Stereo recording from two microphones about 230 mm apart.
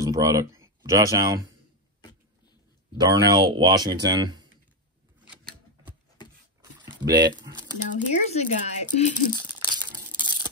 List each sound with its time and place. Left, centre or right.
0.0 s speech: centre
3.0 s speech: centre
7.0 s speech: centre
7.9 s speech: left
9.4 s tearing: centre